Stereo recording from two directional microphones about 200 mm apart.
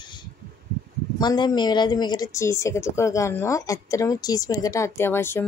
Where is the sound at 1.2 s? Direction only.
20° left (ahead or behind).